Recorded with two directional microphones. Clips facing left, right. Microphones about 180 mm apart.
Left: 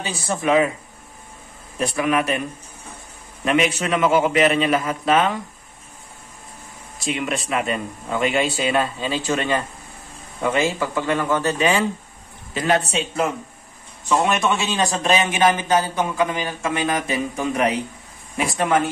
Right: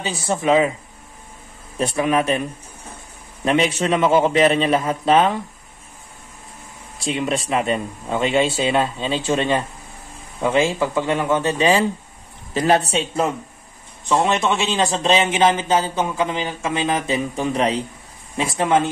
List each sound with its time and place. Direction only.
0.3 s a man's voice: 25° right (ahead or behind)
1.8 s a man's voice: 30° right (ahead or behind)
3.4 s a man's voice: 30° right (ahead or behind)
7.0 s a man's voice: 30° right (ahead or behind)